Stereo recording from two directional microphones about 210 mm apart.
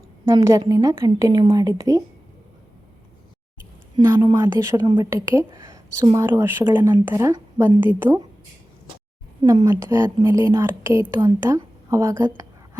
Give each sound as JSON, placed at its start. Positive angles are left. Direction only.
{"t": 0.3, "sound": "a woman's voice", "side_deg": -15}
{"t": 3.9, "sound": "a woman's voice", "side_deg": -20}
{"t": 9.4, "sound": "a woman's voice", "side_deg": -20}